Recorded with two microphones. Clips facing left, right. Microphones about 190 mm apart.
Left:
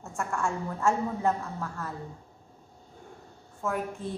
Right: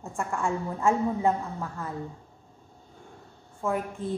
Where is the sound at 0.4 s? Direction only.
15° right (ahead or behind).